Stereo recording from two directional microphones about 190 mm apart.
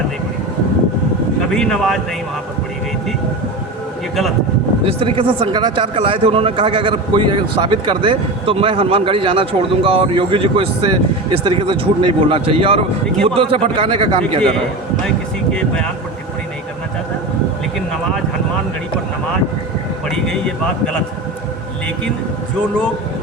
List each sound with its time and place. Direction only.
1.4 s speech: 5° left (ahead or behind)
4.9 s speech: 30° right (ahead or behind)
15.5 s speech: 5° left (ahead or behind)
20.1 s speech: 5° left (ahead or behind)